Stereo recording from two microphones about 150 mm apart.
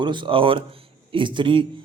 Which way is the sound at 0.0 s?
30° right (ahead or behind).